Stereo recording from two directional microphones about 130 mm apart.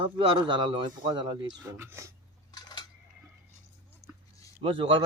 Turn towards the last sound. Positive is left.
turn(degrees=-45)  # may be behind; listen again after turning